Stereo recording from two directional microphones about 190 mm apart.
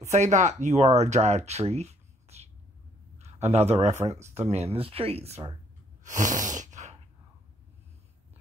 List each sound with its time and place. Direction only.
0.1 s a man's voice: 40° right (ahead or behind)
4.1 s speech: 15° right (ahead or behind)
4.5 s speech: 35° right (ahead or behind)
6.0 s sneeze: 40° right (ahead or behind)